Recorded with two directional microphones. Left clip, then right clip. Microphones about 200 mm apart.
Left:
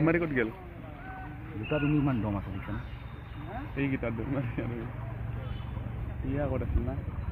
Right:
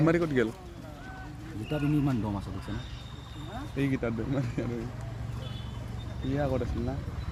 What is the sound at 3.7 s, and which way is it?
Speech, 75° right (ahead or behind).